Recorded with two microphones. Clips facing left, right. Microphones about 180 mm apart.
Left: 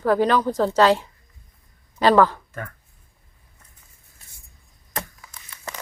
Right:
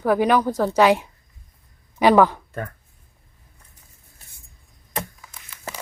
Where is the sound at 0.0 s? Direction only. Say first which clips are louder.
Right 1 dB; 15° right (ahead or behind).